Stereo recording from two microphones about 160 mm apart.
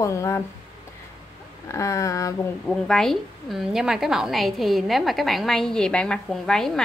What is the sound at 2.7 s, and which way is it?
A woman's voice, 5° left (ahead or behind).